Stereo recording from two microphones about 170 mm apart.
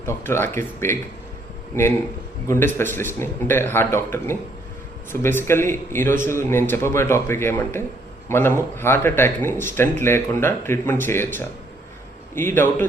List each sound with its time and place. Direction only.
0.0 s speech: 15° left (ahead or behind)